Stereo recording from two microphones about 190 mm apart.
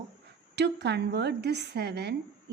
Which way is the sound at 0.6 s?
65° right (ahead or behind).